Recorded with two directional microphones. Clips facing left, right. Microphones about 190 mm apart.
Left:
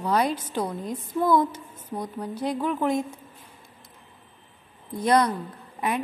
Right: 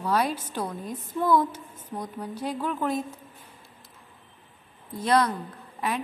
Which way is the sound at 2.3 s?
10° right (ahead or behind).